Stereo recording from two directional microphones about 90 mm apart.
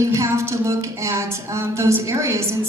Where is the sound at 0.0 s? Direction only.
35° right (ahead or behind).